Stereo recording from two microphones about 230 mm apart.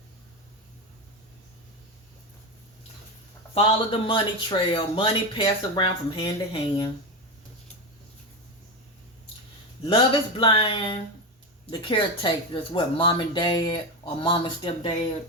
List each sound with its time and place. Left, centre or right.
3.5 s speech: left
9.8 s speech: left